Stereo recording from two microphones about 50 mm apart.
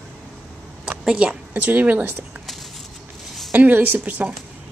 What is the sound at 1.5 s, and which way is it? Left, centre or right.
Speech, right.